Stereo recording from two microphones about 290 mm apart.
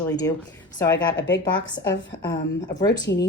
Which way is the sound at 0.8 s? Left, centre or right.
Centre.